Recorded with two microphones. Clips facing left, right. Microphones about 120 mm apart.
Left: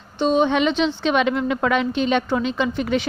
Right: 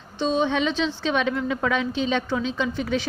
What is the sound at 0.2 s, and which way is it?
A woman's voice, 60° left (ahead or behind).